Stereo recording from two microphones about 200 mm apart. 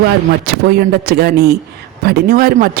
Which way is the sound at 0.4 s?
50° right (ahead or behind).